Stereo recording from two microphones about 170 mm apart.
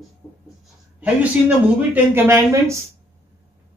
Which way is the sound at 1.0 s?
10° right (ahead or behind).